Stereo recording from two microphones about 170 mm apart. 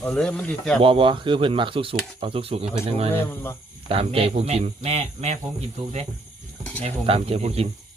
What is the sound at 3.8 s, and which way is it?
Speech, 35° right (ahead or behind).